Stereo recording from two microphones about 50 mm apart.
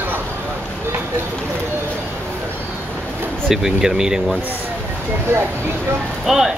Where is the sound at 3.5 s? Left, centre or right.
Centre.